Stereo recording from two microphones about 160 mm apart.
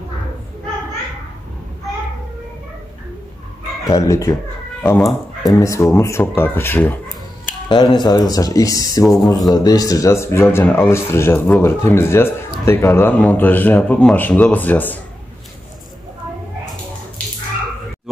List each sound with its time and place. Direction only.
3.8 s speech: 20° left (ahead or behind)
7.6 s speech: 30° left (ahead or behind); by 15.0 s 10° left (ahead or behind)